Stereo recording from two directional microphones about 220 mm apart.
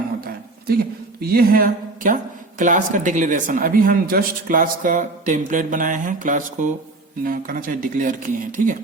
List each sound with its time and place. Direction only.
1.2 s speech: 45° right (ahead or behind)